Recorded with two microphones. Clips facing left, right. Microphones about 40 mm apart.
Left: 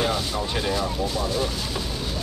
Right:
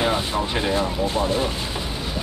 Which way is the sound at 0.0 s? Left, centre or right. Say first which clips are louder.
Right 3 dB; right.